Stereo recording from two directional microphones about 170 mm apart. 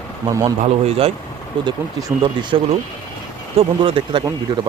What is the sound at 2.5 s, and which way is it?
Speech, 35° right (ahead or behind).